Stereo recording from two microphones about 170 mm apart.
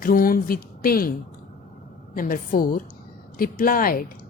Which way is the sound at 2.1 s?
55° left (ahead or behind).